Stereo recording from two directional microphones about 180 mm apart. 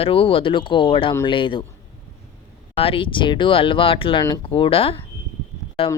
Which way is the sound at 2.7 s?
30° left (ahead or behind).